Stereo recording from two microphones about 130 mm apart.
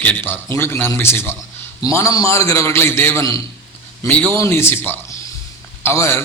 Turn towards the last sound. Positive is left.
turn(degrees=20)  # may be behind; listen again after turning